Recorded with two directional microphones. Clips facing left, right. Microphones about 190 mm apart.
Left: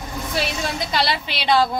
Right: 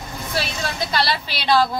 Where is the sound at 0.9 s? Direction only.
20° left (ahead or behind).